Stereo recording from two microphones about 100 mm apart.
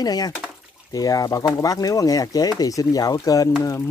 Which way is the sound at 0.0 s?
40° left (ahead or behind).